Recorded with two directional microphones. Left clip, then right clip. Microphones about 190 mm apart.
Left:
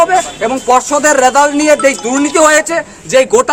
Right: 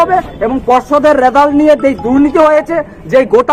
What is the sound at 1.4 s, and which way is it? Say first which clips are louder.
Speech: right 2 dB; 5° left (ahead or behind).